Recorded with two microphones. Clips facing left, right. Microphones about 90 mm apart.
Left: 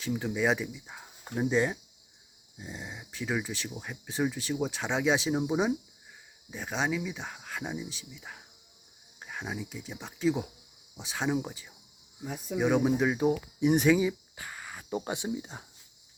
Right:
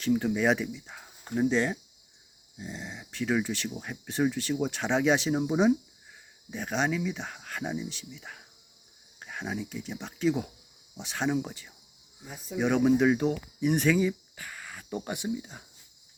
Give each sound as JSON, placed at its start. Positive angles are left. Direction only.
{"t": 0.0, "sound": "speech", "side_deg": 0}
{"t": 13.2, "sound": "speech", "side_deg": 15}
{"t": 14.3, "sound": "speech", "side_deg": 25}